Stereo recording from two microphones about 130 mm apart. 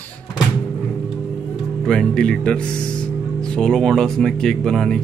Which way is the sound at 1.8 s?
5° left (ahead or behind).